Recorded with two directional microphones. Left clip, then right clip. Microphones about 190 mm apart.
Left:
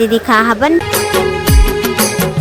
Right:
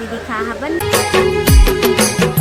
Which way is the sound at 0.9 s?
Centre (ahead or behind).